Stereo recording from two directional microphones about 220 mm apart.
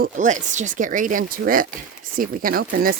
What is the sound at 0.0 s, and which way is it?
Speech, 35° right (ahead or behind).